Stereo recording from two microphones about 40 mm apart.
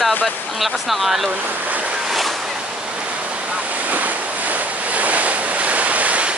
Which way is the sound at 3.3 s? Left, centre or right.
Right.